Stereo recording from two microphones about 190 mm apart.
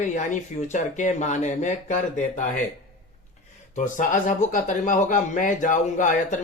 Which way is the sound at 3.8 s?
40° left (ahead or behind).